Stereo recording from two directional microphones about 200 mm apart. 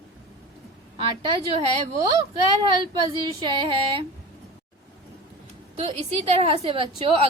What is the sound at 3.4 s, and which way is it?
Speech, 25° right (ahead or behind).